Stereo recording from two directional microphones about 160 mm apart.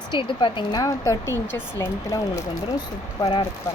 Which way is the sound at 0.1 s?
30° left (ahead or behind).